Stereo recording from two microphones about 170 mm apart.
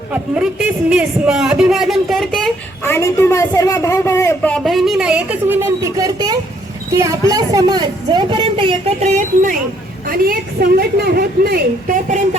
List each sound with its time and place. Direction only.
0.1 s a man's voice: 5° right (ahead or behind)
2.8 s a man's voice: 15° left (ahead or behind)
4.5 s speech: centre (ahead or behind); by 9.6 s 45° right (ahead or behind)
10.1 s a woman's voice: 60° right (ahead or behind)